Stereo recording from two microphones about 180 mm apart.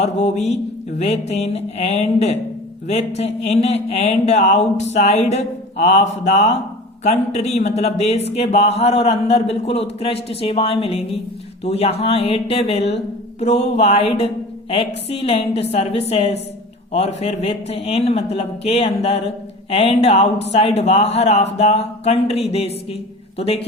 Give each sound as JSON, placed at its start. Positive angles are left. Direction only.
{"t": 0.0, "sound": "speech", "side_deg": 40}